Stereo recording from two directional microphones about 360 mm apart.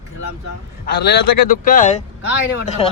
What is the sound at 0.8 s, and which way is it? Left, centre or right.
A man's voice, left.